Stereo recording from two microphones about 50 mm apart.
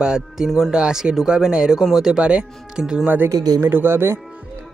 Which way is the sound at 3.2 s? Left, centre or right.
Right.